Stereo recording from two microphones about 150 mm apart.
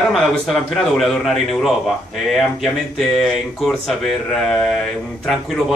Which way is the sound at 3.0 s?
Centre (ahead or behind).